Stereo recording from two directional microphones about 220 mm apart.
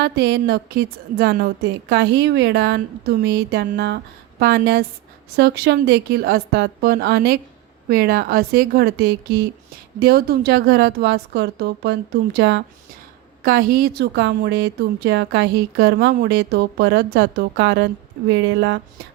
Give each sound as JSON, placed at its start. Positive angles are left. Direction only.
{"t": 0.0, "sound": "a woman's voice", "side_deg": -50}
{"t": 13.4, "sound": "a woman's voice", "side_deg": -45}